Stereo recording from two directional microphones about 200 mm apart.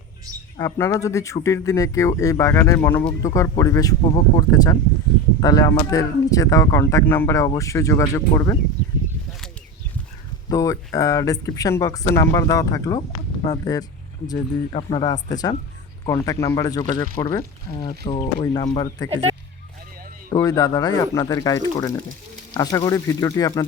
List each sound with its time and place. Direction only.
0.5 s speech: 15° left (ahead or behind)
10.5 s speech: 15° left (ahead or behind)
18.0 s speech: 30° left (ahead or behind)
20.3 s speech: 15° left (ahead or behind)